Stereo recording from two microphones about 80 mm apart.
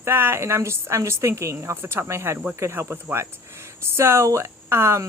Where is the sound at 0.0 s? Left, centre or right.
Right.